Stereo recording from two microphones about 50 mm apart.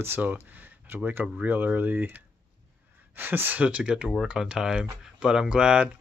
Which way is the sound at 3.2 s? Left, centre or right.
Right.